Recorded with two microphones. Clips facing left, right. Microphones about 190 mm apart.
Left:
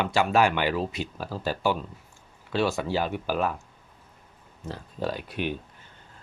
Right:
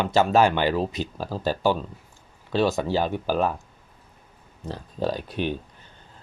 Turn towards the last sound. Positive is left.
turn(degrees=-35)  # may be behind; listen again after turning